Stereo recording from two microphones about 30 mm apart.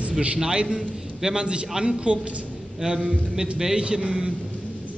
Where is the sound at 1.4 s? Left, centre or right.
Right.